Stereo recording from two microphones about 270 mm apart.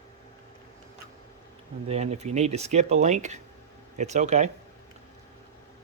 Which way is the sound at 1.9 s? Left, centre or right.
Right.